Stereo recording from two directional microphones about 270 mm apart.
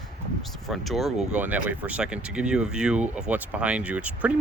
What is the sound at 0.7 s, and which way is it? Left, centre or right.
Speech, centre.